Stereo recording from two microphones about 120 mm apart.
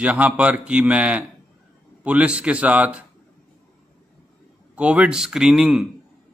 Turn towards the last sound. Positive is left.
turn(degrees=-5)  # may be behind; listen again after turning